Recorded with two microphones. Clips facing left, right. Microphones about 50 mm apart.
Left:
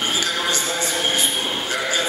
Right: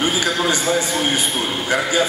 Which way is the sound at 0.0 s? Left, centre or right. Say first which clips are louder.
Right 4 dB; centre.